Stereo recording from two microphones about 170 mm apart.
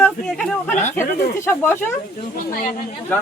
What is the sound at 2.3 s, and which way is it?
Speech, 55° left (ahead or behind).